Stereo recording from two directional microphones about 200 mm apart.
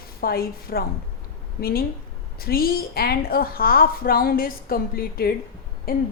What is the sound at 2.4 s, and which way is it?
A woman's voice, 50° left (ahead or behind).